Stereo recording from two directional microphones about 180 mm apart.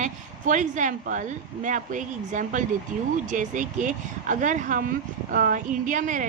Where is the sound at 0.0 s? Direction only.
45° right (ahead or behind).